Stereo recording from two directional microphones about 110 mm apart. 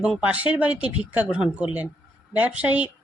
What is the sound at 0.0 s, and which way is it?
Speech, 10° right (ahead or behind).